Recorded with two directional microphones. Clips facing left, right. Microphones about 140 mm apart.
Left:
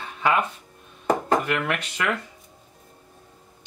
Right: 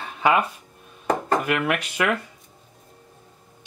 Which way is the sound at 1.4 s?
10° right (ahead or behind).